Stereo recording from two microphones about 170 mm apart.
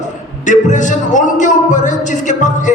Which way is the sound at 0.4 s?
45° left (ahead or behind).